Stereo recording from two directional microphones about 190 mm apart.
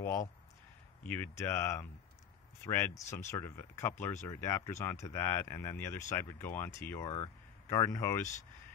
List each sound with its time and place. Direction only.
1.0 s speech: 10° left (ahead or behind)